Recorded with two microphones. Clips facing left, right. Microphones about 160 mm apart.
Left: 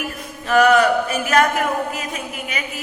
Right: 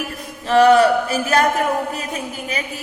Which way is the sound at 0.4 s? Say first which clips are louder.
Right 2 dB; 30° right (ahead or behind).